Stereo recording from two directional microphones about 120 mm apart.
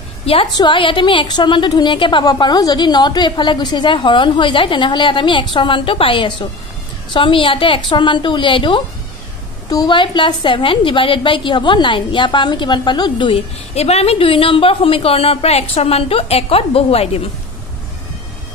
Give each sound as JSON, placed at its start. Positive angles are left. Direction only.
{"t": 0.2, "sound": "a sound", "side_deg": 50}
{"t": 0.6, "sound": "a woman's voice", "side_deg": 45}
{"t": 13.7, "sound": "a woman's voice", "side_deg": 60}